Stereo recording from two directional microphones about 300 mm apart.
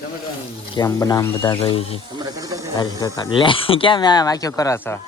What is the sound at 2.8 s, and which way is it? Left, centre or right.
Speech, centre.